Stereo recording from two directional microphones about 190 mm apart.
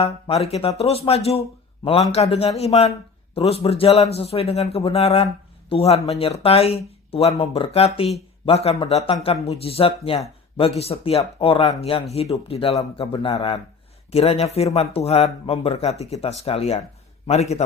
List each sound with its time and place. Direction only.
0.4 s speech: 30° left (ahead or behind)